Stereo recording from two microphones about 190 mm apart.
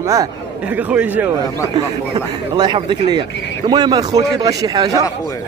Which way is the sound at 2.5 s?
25° right (ahead or behind).